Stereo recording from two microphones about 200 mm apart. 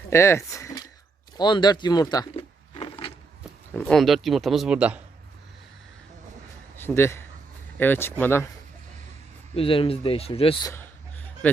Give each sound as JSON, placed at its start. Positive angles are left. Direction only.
{"t": 0.1, "sound": "speech", "side_deg": 15}
{"t": 3.8, "sound": "a man's voice", "side_deg": 0}
{"t": 6.7, "sound": "a man's voice", "side_deg": 10}
{"t": 9.6, "sound": "a man's voice", "side_deg": 25}
{"t": 11.4, "sound": "speech", "side_deg": 5}